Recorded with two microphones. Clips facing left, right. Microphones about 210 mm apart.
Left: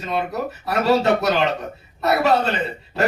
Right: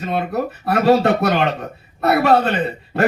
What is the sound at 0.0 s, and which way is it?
A man's voice, 55° right (ahead or behind).